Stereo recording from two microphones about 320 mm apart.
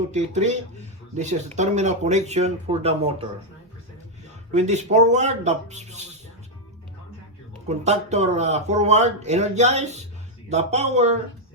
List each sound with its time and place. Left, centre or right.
0.1 s speech: right
4.5 s speech: right
7.7 s speech: right